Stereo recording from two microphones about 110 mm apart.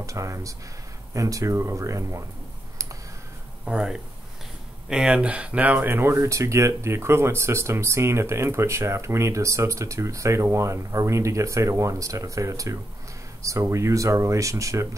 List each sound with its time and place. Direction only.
0.0 s speech: 30° right (ahead or behind)
3.6 s speech: 5° right (ahead or behind); by 14.9 s 30° right (ahead or behind)